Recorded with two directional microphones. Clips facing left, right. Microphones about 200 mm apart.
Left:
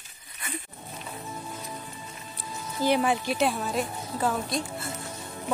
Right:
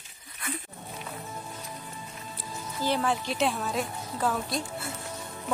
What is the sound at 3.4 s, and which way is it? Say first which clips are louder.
Speech: left 2 dB; centre (ahead or behind).